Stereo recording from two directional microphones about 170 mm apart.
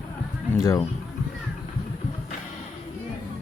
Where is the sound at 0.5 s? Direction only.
20° left (ahead or behind).